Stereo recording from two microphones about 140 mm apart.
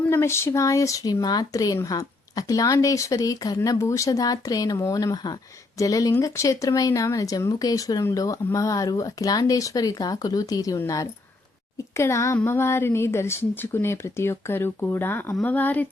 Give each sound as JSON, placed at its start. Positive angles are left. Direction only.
{"t": 0.1, "sound": "speech", "side_deg": 20}